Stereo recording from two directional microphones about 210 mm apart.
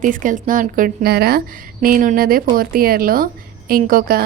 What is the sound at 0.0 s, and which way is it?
A woman's voice, 40° right (ahead or behind).